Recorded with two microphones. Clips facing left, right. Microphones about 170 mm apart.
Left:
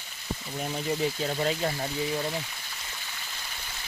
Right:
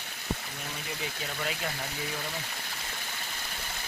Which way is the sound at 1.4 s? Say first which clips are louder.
Left 5 dB; 35° left (ahead or behind).